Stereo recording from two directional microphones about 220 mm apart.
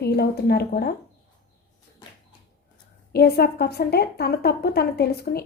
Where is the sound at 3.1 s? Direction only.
45° left (ahead or behind).